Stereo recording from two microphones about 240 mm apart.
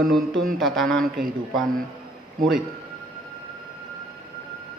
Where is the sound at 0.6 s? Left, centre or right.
Centre.